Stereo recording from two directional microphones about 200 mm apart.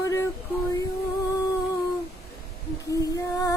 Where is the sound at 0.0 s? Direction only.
15° left (ahead or behind).